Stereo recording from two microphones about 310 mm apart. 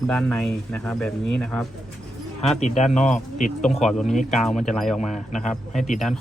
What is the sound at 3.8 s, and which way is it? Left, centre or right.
Speech, centre.